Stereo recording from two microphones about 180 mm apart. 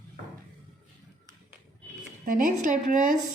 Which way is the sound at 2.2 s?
50° right (ahead or behind).